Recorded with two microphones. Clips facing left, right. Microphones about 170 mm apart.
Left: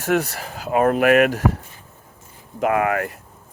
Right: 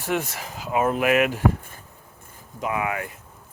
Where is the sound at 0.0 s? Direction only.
40° left (ahead or behind).